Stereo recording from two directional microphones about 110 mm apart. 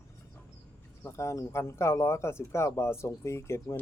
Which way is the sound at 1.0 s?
25° left (ahead or behind).